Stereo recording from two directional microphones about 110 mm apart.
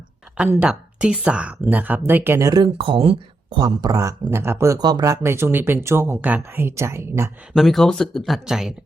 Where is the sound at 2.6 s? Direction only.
50° right (ahead or behind).